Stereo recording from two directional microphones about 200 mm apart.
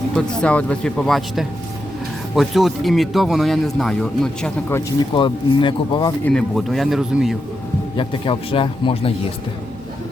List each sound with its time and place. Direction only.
0.2 s speech: 5° left (ahead or behind)
5.1 s a man's voice: 25° left (ahead or behind)
6.2 s speech: centre (ahead or behind)
7.9 s a man's voice: 25° left (ahead or behind)